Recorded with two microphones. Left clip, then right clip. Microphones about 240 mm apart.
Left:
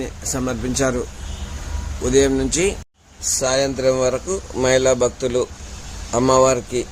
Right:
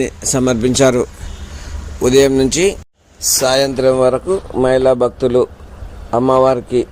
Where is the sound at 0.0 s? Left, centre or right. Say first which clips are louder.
Right 9 dB; right.